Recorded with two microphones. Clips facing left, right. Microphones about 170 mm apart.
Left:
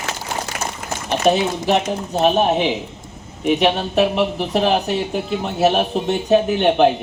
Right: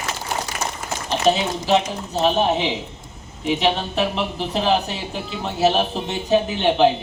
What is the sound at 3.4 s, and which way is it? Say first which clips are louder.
Speech: left 4 dB; 55° left (ahead or behind).